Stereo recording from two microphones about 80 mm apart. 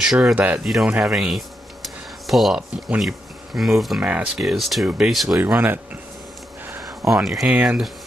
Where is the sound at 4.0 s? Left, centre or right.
Centre.